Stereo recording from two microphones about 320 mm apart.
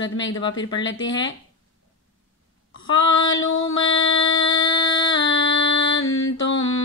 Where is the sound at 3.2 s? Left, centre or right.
Left.